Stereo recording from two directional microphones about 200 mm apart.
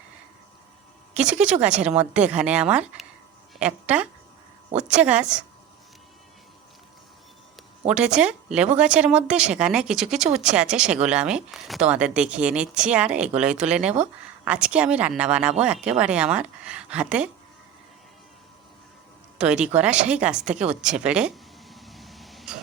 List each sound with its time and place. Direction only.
1.2 s a woman's voice: 5° right (ahead or behind)
4.7 s speech: 35° right (ahead or behind)
4.9 s speech: 5° right (ahead or behind)
7.9 s speech: 5° right (ahead or behind)
19.4 s speech: 5° right (ahead or behind)